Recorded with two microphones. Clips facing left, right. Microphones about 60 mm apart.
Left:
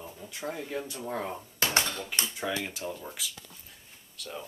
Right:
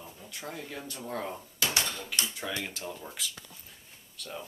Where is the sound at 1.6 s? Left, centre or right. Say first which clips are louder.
Left 3 dB; left.